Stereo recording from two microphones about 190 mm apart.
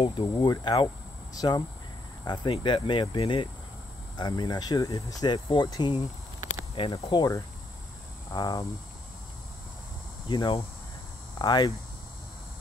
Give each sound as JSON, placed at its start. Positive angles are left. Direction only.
{"t": 0.0, "sound": "speech", "side_deg": 25}
{"t": 10.2, "sound": "speech", "side_deg": 25}